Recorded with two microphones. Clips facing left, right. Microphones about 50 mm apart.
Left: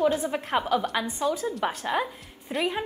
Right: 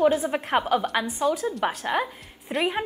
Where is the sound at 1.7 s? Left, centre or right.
Centre.